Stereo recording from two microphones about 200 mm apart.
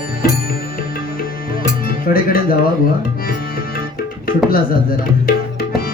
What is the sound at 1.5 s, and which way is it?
Music, 45° left (ahead or behind).